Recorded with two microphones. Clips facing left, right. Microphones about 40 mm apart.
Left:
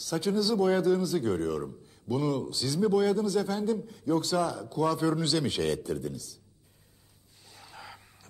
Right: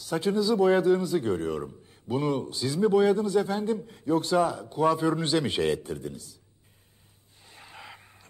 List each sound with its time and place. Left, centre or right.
0.0 s a man's voice: right
7.4 s vehicle: right